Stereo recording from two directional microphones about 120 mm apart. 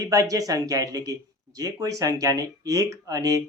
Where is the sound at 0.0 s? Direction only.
30° right (ahead or behind).